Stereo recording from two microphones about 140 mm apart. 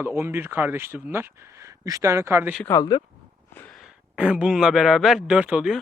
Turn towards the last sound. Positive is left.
turn(degrees=-5)  # may be behind; listen again after turning